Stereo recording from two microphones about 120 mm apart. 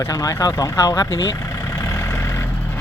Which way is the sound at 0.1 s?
30° left (ahead or behind).